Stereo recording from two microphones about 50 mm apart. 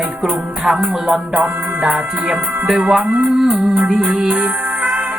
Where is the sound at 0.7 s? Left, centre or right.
Centre.